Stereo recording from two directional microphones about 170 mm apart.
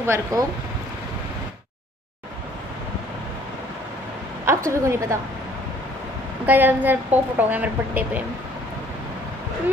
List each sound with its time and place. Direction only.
0.0 s a woman's voice: 20° right (ahead or behind)
4.6 s a woman's voice: 15° right (ahead or behind)
6.4 s a woman's voice: 10° right (ahead or behind)